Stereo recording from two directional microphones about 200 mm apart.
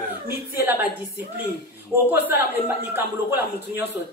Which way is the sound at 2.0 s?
10° right (ahead or behind).